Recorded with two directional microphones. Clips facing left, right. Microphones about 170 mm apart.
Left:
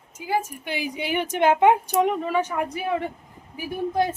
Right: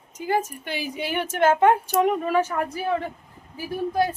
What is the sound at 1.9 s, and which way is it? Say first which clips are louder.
Speech: right 1 dB; 5° right (ahead or behind).